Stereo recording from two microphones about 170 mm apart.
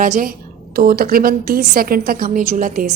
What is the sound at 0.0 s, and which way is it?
A woman's voice, 50° right (ahead or behind).